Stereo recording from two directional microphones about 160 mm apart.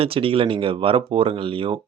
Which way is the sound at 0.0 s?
35° right (ahead or behind).